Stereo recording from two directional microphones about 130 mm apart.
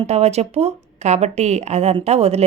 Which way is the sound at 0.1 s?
55° right (ahead or behind).